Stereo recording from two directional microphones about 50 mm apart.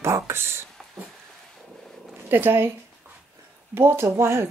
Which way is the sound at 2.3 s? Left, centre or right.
Right.